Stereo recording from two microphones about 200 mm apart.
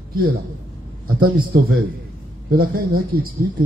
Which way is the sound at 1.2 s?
45° right (ahead or behind).